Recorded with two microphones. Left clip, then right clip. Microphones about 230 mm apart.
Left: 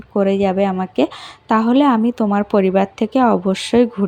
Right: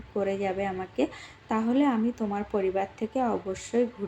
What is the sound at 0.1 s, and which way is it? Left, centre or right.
A woman's voice, left.